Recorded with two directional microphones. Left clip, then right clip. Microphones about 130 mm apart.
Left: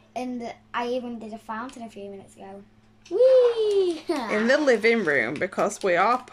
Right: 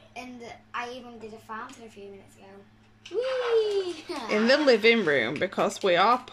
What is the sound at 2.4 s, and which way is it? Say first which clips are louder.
A child's voice: left 7 dB; 90° left.